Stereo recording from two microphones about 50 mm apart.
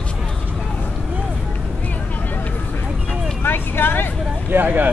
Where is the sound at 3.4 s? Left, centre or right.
Left.